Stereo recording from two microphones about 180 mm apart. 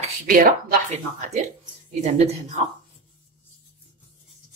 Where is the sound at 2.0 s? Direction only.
40° right (ahead or behind).